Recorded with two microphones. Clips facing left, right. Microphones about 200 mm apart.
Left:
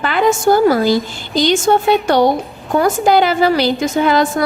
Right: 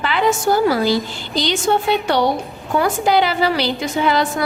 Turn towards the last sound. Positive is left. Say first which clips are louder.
# left 4 dB
turn(degrees=45)  # may be behind; listen again after turning